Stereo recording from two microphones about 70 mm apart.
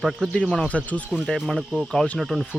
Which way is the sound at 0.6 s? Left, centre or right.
Left.